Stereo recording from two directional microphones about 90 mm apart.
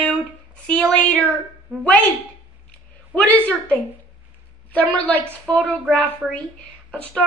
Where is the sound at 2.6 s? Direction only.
15° left (ahead or behind).